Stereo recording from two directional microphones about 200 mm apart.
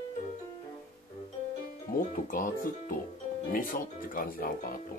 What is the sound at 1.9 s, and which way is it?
Speech, 40° left (ahead or behind).